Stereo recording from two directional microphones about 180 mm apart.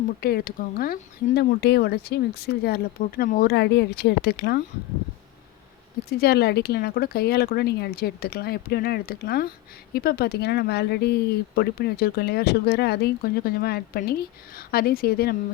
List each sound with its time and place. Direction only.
0.2 s speech: 60° left (ahead or behind)
1.4 s speech: 65° left (ahead or behind)
6.1 s speech: 60° left (ahead or behind)